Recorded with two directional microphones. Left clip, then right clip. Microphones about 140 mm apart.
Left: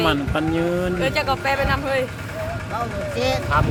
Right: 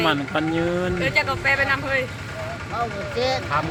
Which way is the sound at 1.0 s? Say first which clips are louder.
Right 1 dB; 40° left (ahead or behind).